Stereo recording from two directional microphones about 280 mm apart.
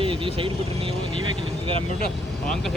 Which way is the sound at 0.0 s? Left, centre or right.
Centre.